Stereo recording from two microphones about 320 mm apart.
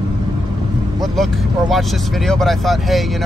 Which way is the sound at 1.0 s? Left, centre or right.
Centre.